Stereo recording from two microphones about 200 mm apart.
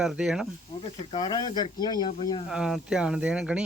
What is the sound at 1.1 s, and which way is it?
Speech, 20° left (ahead or behind).